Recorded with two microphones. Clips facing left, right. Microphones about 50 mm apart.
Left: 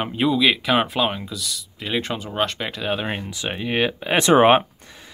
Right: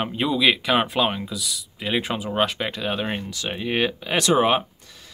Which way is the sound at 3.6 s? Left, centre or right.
Centre.